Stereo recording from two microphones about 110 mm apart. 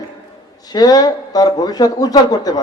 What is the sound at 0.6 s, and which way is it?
Speech, 35° left (ahead or behind).